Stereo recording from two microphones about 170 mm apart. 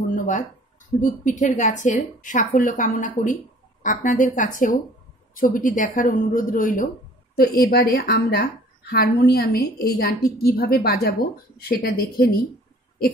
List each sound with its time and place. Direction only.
0.1 s a sound: 50° left (ahead or behind)
1.0 s a woman's voice: 45° left (ahead or behind)
7.3 s a woman's voice: 60° left (ahead or behind)